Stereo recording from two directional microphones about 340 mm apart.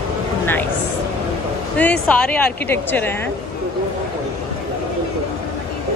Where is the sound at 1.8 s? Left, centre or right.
Centre.